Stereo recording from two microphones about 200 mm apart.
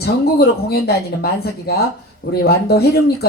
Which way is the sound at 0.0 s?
50° left (ahead or behind).